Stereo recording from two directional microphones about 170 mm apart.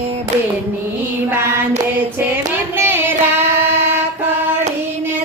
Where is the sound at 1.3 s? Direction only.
15° right (ahead or behind).